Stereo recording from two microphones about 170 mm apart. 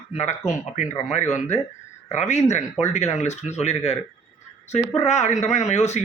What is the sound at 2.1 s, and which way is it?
Speech, 40° left (ahead or behind).